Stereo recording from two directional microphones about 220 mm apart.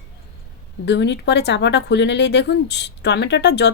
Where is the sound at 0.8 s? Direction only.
50° left (ahead or behind).